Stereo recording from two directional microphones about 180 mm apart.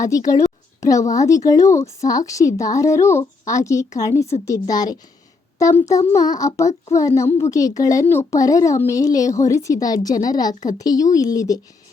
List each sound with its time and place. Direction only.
0.1 s a woman's voice: 20° left (ahead or behind)